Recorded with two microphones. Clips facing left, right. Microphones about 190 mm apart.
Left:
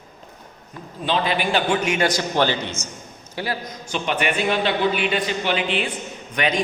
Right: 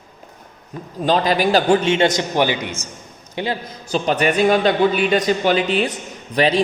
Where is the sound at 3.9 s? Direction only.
40° right (ahead or behind).